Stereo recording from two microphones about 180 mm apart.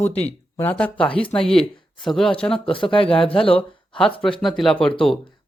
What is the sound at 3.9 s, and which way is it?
Speech, 5° left (ahead or behind).